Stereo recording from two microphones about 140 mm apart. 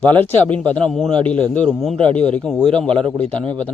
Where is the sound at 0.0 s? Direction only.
10° left (ahead or behind).